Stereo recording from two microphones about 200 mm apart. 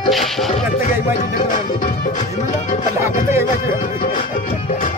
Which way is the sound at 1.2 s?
40° left (ahead or behind).